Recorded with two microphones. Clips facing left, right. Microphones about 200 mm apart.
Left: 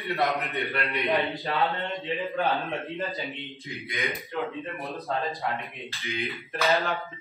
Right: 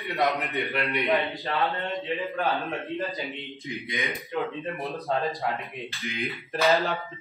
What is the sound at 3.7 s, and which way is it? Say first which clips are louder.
Speech: right 3 dB; 15° right (ahead or behind).